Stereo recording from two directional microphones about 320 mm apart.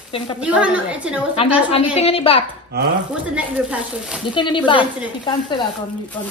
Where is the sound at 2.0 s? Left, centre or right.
Centre.